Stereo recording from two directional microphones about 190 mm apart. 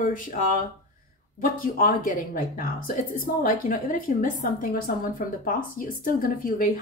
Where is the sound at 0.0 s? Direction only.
45° left (ahead or behind).